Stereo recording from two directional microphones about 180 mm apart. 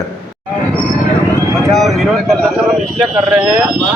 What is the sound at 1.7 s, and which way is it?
Speech, centre (ahead or behind).